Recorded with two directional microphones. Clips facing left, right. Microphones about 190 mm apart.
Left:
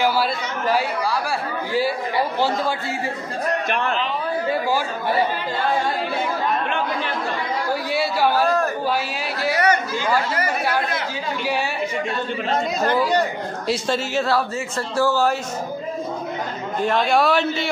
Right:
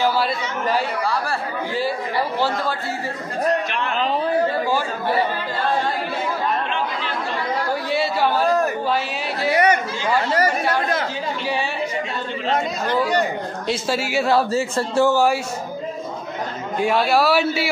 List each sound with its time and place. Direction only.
0.2 s speech: 5° left (ahead or behind)
7.9 s a sound: 5° left (ahead or behind)
9.5 s chatter: 20° right (ahead or behind)
13.7 s a man's voice: 5° right (ahead or behind)
14.5 s speech: 25° right (ahead or behind)
16.8 s a man's voice: 10° right (ahead or behind)